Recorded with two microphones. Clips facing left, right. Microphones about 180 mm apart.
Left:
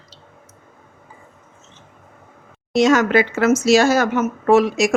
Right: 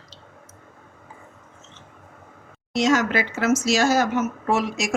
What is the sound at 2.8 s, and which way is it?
Speech, 60° left (ahead or behind).